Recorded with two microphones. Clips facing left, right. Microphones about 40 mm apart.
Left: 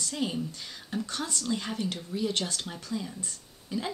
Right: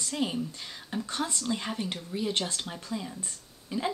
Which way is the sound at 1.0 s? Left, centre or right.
Right.